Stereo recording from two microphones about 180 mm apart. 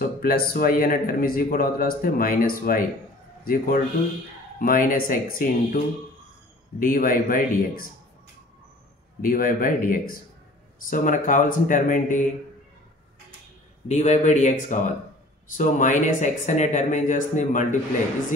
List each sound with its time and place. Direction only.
0.0 s speech: 55° left (ahead or behind)
6.8 s speech: 50° left (ahead or behind)
9.2 s speech: 50° left (ahead or behind)
13.8 s speech: 40° left (ahead or behind)